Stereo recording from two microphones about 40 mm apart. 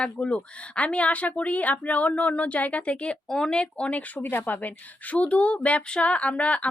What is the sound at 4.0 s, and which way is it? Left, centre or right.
Speech, left.